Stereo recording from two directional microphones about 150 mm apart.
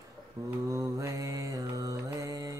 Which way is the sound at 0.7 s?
20° right (ahead or behind).